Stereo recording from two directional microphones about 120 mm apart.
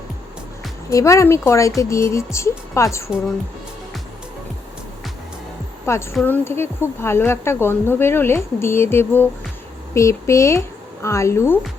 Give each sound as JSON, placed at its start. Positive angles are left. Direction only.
{"t": 0.9, "sound": "a woman's voice", "side_deg": 25}
{"t": 5.8, "sound": "a woman's voice", "side_deg": 20}